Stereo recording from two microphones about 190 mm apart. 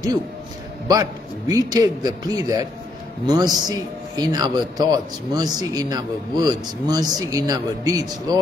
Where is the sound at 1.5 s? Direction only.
20° right (ahead or behind).